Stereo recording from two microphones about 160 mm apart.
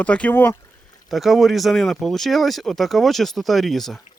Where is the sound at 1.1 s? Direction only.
Centre (ahead or behind).